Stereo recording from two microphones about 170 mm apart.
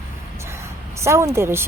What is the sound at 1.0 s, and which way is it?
Speech, 15° right (ahead or behind).